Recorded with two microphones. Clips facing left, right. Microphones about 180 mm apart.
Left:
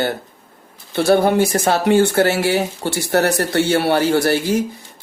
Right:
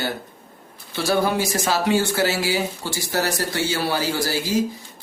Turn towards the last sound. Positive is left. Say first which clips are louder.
# left 6 dB
turn(degrees=65)  # may be behind; listen again after turning